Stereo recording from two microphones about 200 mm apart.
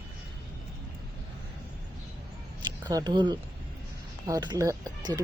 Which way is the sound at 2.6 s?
20° right (ahead or behind).